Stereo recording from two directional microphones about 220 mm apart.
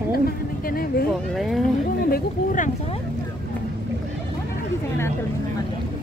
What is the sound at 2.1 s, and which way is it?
Speech, 40° left (ahead or behind).